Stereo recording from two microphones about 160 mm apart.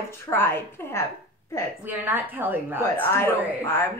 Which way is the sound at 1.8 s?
10° right (ahead or behind).